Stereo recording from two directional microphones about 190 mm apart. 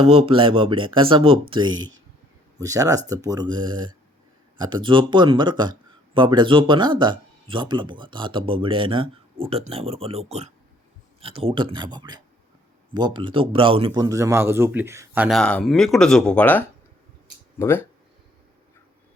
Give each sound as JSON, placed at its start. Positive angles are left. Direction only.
{"t": 0.0, "sound": "speech", "side_deg": -30}
{"t": 1.7, "sound": "speech", "side_deg": -90}
{"t": 2.6, "sound": "speech", "side_deg": -15}
{"t": 15.4, "sound": "speech", "side_deg": 5}